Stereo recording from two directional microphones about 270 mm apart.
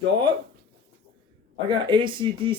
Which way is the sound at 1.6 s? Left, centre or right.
Centre.